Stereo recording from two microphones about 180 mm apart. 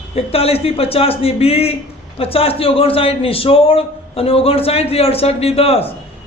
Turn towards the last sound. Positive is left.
turn(degrees=35)  # may be behind; listen again after turning